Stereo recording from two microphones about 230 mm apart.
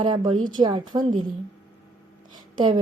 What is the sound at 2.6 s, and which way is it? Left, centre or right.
Speech, centre.